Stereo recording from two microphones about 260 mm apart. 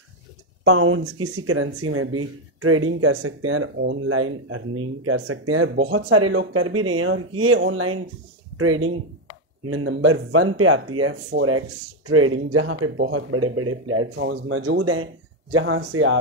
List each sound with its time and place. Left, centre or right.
0.7 s speech: right